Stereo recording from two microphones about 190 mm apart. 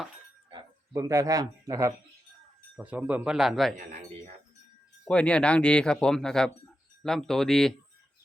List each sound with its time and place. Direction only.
0.9 s speech: 15° right (ahead or behind)
2.7 s speech: 5° right (ahead or behind)
5.0 s speech: 5° left (ahead or behind)